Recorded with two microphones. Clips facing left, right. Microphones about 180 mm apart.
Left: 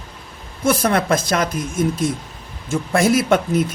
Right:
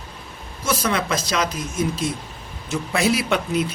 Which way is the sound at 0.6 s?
55° left (ahead or behind).